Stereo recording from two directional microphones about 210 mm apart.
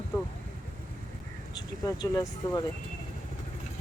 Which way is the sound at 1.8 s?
15° left (ahead or behind).